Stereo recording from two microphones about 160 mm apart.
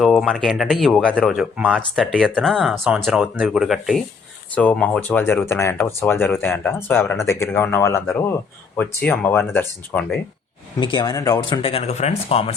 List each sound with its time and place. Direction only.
0.0 s speech: centre (ahead or behind)
10.8 s speech: 30° left (ahead or behind)